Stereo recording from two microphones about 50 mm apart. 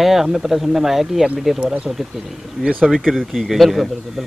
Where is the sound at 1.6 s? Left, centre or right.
Right.